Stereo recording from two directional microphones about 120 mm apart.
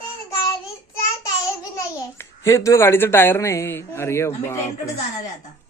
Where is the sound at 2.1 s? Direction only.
25° left (ahead or behind).